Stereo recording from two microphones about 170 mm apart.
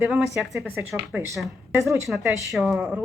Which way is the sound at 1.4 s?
15° right (ahead or behind).